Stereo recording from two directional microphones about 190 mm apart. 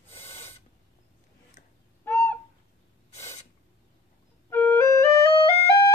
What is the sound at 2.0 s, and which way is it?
Owl, 10° left (ahead or behind).